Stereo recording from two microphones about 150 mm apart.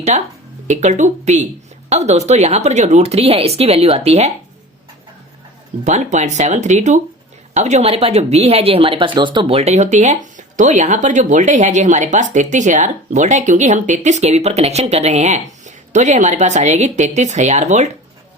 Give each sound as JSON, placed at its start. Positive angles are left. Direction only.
{"t": 0.1, "sound": "speech", "side_deg": -50}
{"t": 5.8, "sound": "speech", "side_deg": -50}